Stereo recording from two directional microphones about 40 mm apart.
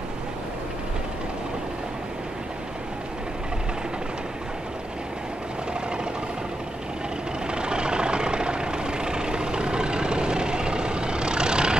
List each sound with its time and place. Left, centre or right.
7.5 s vehicle: right